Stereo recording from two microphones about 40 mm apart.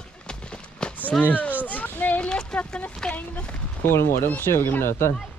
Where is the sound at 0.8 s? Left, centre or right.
Left.